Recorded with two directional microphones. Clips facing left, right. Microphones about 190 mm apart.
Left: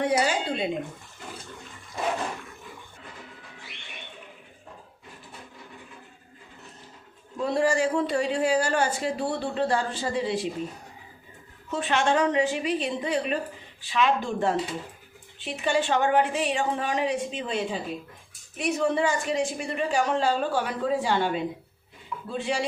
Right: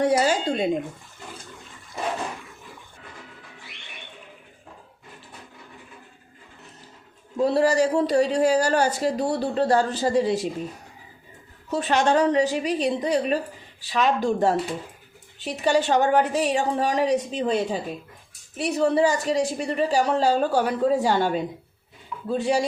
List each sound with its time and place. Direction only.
0.0 s speech: 40° right (ahead or behind)
7.3 s speech: 40° right (ahead or behind)
11.7 s speech: 40° right (ahead or behind)